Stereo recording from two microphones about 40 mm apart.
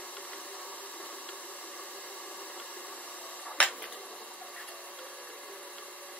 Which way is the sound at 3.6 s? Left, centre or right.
Left.